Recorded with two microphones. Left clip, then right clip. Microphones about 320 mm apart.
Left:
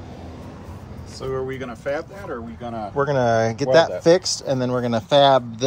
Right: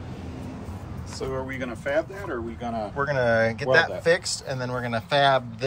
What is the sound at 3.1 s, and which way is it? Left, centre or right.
Speech, left.